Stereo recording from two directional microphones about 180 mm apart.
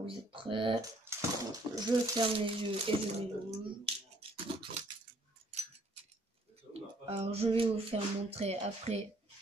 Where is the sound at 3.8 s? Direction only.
30° right (ahead or behind).